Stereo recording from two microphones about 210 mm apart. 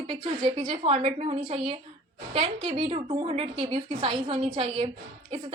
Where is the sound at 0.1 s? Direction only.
25° right (ahead or behind).